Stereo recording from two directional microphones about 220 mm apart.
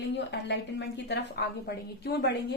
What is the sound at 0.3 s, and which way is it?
Speech, 50° left (ahead or behind).